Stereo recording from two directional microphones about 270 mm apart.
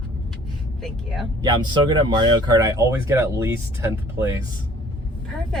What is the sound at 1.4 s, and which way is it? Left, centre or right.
Speech, centre.